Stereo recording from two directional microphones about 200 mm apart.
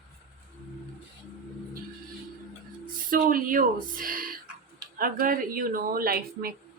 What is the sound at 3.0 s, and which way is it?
Speech, 45° right (ahead or behind).